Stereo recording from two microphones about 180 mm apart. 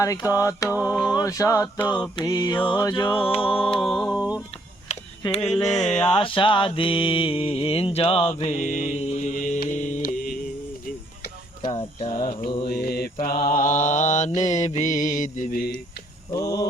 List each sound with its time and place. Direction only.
0.0 s mantra: 20° left (ahead or behind)
3.8 s music: centre (ahead or behind)
4.9 s a sound: 40° left (ahead or behind)
5.8 s music: 5° left (ahead or behind)
6.1 s mantra: 25° left (ahead or behind); by 10.3 s 50° left (ahead or behind)
10.8 s tick-tock: 50° left (ahead or behind)
11.7 s a sound: 30° left (ahead or behind)
12.2 s mantra: 50° left (ahead or behind)
16.3 s mantra: 20° left (ahead or behind)